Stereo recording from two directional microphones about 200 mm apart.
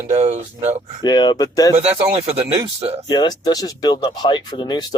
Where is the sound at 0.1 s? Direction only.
35° right (ahead or behind).